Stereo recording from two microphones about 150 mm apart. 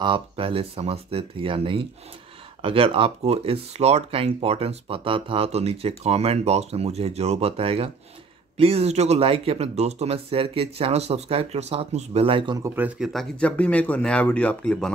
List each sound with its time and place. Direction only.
0.0 s speech: 35° right (ahead or behind)
12.6 s speech: 10° right (ahead or behind); by 14.9 s 10° left (ahead or behind)